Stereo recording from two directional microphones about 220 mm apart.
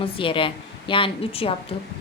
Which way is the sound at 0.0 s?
25° left (ahead or behind).